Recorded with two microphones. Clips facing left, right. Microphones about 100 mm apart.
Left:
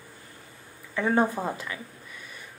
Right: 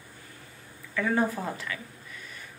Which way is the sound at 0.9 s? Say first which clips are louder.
Left 3 dB; 25° left (ahead or behind).